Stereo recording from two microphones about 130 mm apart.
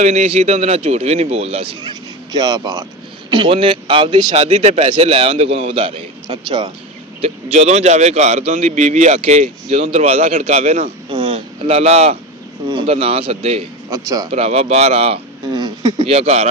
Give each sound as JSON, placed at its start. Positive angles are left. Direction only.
{"t": 0.0, "sound": "speech", "side_deg": -55}
{"t": 1.8, "sound": "speech", "side_deg": -30}
{"t": 4.3, "sound": "a man's voice", "side_deg": -65}
{"t": 7.2, "sound": "a man's voice", "side_deg": -55}
{"t": 12.6, "sound": "speech", "side_deg": -40}
{"t": 13.9, "sound": "a man's voice", "side_deg": -25}
{"t": 14.3, "sound": "speech", "side_deg": -50}
{"t": 15.4, "sound": "a sound", "side_deg": -30}
{"t": 16.0, "sound": "speech", "side_deg": -50}